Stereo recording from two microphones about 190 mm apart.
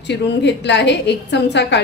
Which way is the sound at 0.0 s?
65° left (ahead or behind).